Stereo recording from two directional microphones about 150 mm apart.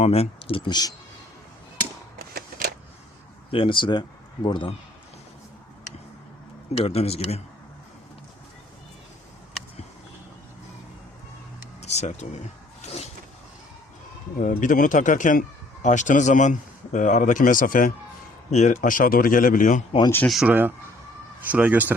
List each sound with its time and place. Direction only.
0.0 s speech: 40° left (ahead or behind)
2.1 s shuffling cards: 90° right
3.5 s speech: 35° left (ahead or behind)
6.7 s speech: 45° left (ahead or behind)
11.8 s speech: 45° left (ahead or behind)
12.8 s vehicle: 45° left (ahead or behind)
14.3 s speech: 60° left (ahead or behind)
18.5 s speech: 55° left (ahead or behind)
18.8 s speech: 65° left (ahead or behind)
20.2 s speech: centre (ahead or behind)
20.5 s speech: 10° right (ahead or behind)